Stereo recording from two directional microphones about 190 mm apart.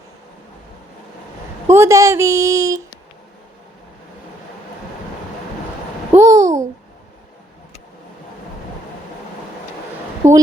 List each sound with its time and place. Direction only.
1.6 s a woman's voice: 15° right (ahead or behind)
6.1 s babbling: 15° right (ahead or behind)
10.2 s a sound: 40° right (ahead or behind)